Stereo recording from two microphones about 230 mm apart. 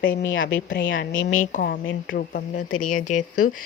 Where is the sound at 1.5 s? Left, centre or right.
Left.